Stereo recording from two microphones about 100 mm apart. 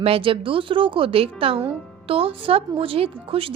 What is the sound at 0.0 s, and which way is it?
Speech, 65° right (ahead or behind).